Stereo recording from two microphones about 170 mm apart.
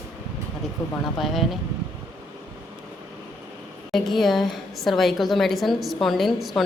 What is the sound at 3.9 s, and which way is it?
A woman's voice, centre (ahead or behind).